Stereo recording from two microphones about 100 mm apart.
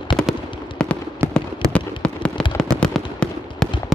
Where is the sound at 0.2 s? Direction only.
10° left (ahead or behind).